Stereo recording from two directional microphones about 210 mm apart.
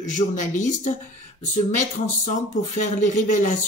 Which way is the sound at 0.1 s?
35° left (ahead or behind).